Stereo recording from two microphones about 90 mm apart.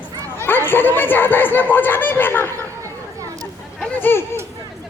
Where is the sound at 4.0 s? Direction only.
25° left (ahead or behind).